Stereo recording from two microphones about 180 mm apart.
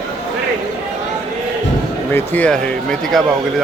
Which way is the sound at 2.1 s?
10° left (ahead or behind).